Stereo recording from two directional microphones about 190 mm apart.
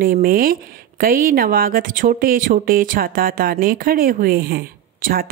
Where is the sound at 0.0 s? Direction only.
50° right (ahead or behind).